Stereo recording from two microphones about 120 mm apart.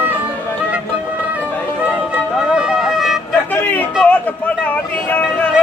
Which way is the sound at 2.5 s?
5° right (ahead or behind).